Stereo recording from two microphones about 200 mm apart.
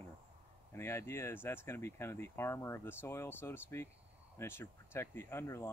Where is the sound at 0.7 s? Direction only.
10° left (ahead or behind).